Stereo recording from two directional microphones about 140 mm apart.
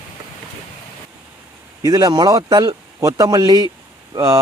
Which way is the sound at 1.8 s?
30° right (ahead or behind).